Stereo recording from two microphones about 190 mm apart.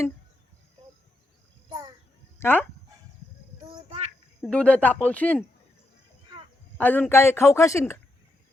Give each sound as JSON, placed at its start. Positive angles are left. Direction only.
{"t": 2.4, "sound": "speech", "side_deg": 10}
{"t": 4.4, "sound": "speech", "side_deg": 5}
{"t": 6.7, "sound": "speech", "side_deg": 10}